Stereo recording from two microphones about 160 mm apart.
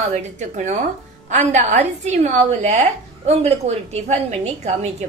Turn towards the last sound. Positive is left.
turn(degrees=-45)  # may be behind; listen again after turning